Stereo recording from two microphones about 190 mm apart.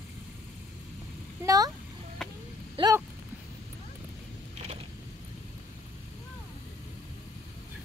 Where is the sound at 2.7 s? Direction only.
20° right (ahead or behind).